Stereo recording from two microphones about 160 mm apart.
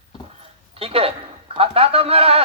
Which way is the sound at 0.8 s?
35° right (ahead or behind).